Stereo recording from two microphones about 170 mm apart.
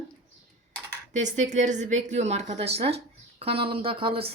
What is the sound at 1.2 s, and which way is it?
A woman's voice, 45° right (ahead or behind).